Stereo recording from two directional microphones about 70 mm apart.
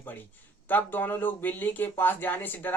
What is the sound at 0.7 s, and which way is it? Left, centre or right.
A man's voice, left.